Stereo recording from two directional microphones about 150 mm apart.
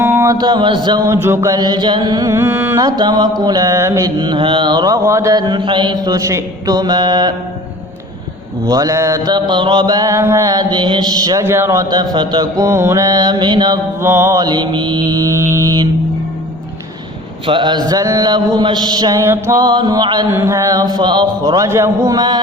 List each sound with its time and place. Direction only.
0.0 s mantra: 15° right (ahead or behind)
8.6 s mantra: 25° right (ahead or behind)
14.0 s mantra: 15° right (ahead or behind)
17.4 s mantra: 35° right (ahead or behind)